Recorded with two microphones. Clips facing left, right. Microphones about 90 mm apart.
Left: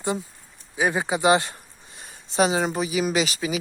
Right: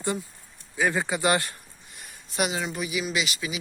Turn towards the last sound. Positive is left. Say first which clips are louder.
# left 5 dB
turn(degrees=40)  # may be behind; listen again after turning